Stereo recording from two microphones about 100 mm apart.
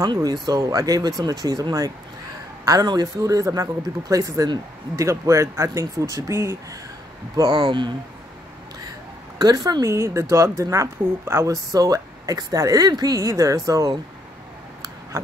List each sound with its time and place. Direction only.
0.0 s speech: 40° right (ahead or behind)
7.5 s a woman's voice: 55° right (ahead or behind)
9.4 s a woman's voice: 45° right (ahead or behind)
9.8 s speech: 30° right (ahead or behind)